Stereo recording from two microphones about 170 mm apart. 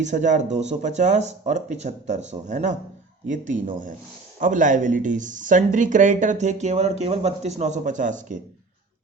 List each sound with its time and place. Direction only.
0.0 s speech: 45° right (ahead or behind)